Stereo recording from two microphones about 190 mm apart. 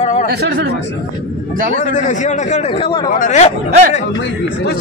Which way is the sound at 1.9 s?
40° left (ahead or behind).